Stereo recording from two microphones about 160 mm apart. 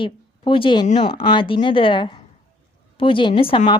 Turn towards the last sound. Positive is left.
turn(degrees=35)  # may be behind; listen again after turning